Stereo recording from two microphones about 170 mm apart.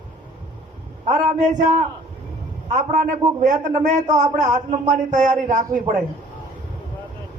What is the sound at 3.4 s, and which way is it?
Speech, 45° right (ahead or behind).